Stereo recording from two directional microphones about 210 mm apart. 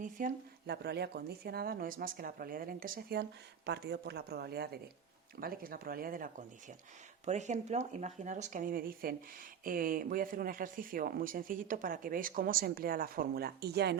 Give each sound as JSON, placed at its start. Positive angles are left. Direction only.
{"t": 0.0, "sound": "speech", "side_deg": -40}